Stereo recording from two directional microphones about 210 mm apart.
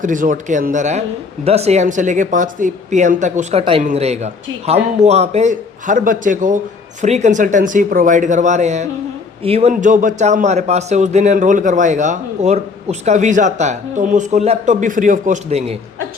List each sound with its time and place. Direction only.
0.0 s a man's voice: 40° right (ahead or behind)